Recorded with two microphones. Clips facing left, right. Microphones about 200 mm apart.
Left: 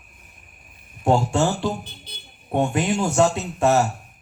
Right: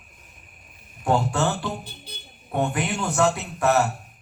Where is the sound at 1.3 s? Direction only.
25° left (ahead or behind).